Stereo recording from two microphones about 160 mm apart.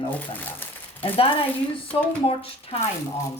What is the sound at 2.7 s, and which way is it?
Speech, 35° left (ahead or behind).